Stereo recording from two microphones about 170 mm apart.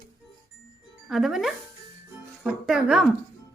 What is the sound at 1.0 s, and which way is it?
A woman's voice, centre (ahead or behind).